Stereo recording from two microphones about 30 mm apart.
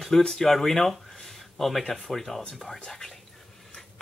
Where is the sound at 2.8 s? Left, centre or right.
Centre.